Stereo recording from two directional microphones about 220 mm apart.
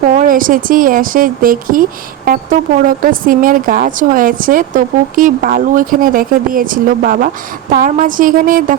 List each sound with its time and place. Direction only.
0.2 s speech: 40° right (ahead or behind)